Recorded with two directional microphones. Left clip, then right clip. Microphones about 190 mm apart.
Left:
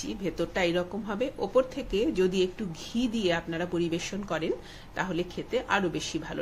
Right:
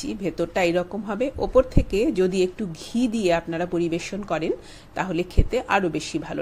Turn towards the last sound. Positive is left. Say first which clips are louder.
# right 5 dB
turn(degrees=-30)  # may be behind; listen again after turning